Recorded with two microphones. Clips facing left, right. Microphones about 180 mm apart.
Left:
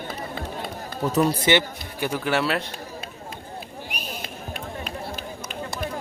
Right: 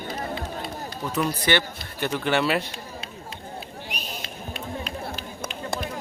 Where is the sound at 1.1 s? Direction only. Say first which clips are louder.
Left 4 dB; 30° left (ahead or behind).